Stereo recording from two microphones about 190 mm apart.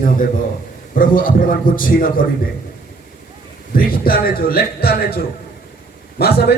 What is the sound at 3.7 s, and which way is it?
A man's voice, 50° left (ahead or behind).